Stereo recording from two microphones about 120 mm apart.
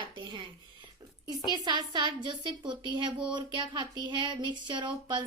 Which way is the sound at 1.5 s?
35° right (ahead or behind).